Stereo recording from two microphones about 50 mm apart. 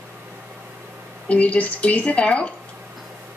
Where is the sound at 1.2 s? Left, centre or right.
Left.